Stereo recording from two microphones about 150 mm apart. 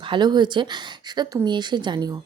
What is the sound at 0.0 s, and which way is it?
A woman's voice, 30° right (ahead or behind).